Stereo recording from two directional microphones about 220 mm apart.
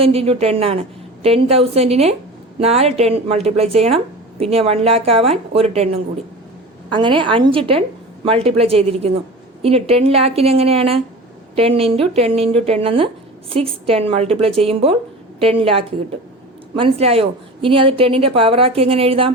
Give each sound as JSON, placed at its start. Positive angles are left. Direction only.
{"t": 0.0, "sound": "a woman's voice", "side_deg": -25}